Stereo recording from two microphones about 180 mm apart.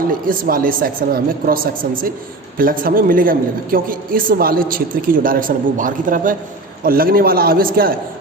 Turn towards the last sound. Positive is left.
turn(degrees=-55)  # may be behind; listen again after turning